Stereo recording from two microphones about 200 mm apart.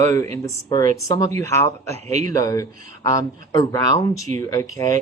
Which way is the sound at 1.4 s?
15° left (ahead or behind).